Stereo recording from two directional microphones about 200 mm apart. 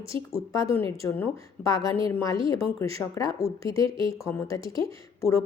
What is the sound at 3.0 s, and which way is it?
A woman's voice, 15° left (ahead or behind).